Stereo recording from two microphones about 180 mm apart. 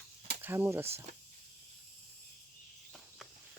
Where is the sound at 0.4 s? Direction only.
10° right (ahead or behind).